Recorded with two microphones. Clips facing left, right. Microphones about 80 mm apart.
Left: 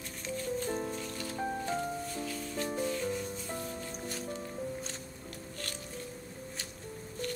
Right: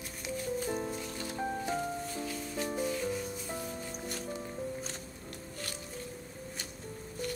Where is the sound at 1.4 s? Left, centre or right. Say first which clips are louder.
Even; centre.